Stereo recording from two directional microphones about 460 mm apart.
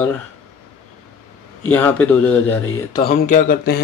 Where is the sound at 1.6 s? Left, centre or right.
Centre.